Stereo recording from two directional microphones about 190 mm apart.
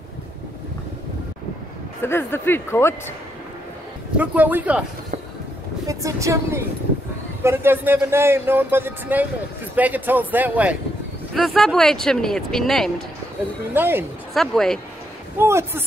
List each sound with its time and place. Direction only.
2.0 s speech: 10° left (ahead or behind)
4.2 s speech: 10° right (ahead or behind)
5.9 s speech: 15° right (ahead or behind); by 12.9 s centre (ahead or behind)
13.7 s speech: 10° right (ahead or behind)
14.3 s speech: centre (ahead or behind)
15.3 s speech: 15° right (ahead or behind)